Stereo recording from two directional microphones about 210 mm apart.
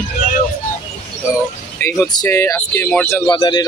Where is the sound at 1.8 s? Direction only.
15° left (ahead or behind).